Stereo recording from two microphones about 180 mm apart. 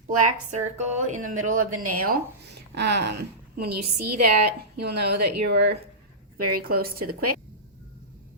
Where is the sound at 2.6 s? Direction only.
70° right (ahead or behind).